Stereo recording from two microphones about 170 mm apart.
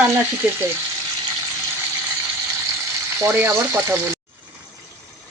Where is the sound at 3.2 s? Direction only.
15° right (ahead or behind).